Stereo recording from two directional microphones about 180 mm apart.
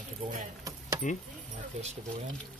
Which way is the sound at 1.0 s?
45° left (ahead or behind).